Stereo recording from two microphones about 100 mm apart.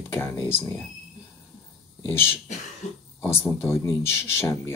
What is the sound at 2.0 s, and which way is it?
Speech, 25° left (ahead or behind).